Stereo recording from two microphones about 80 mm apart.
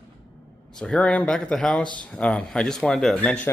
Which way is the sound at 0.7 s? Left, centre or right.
Centre.